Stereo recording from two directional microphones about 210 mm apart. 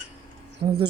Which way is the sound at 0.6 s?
20° right (ahead or behind).